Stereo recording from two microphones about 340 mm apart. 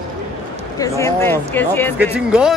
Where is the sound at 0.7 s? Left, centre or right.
Centre.